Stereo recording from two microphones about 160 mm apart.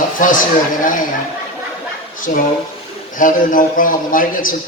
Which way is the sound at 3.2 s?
55° left (ahead or behind).